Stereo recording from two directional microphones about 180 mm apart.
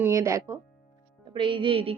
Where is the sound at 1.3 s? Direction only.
25° right (ahead or behind).